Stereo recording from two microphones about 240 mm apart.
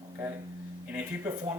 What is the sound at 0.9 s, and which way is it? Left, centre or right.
Speech, centre.